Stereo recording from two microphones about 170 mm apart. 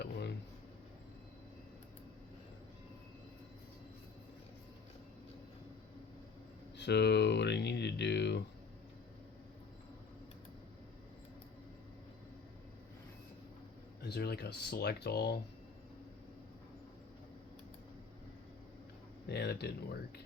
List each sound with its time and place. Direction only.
0.0 s a sound: 90° left
6.7 s speech: 85° left
14.0 s speech: 70° left (ahead or behind)
19.3 s speech: 75° left (ahead or behind)